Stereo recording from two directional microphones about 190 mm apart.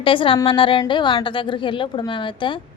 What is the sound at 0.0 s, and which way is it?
A woman's voice, 25° left (ahead or behind).